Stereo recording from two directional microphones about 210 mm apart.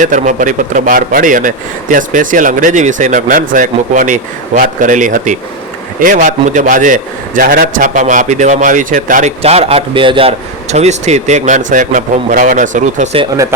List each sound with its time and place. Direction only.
0.0 s a man's voice: 35° right (ahead or behind)